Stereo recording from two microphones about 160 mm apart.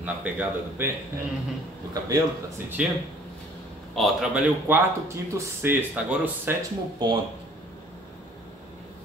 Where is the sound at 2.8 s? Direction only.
5° right (ahead or behind).